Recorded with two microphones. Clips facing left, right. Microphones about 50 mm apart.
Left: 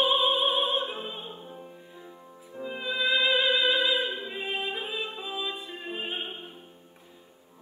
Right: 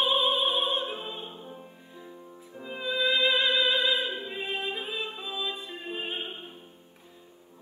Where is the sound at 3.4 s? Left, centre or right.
Left.